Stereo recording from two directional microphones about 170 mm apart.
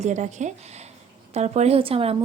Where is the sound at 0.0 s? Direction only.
45° right (ahead or behind).